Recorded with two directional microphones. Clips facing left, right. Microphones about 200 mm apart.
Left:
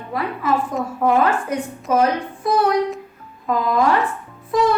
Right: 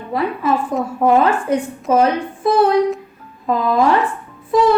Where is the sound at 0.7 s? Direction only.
25° right (ahead or behind).